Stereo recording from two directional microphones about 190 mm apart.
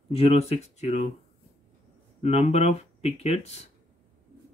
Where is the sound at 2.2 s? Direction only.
35° left (ahead or behind).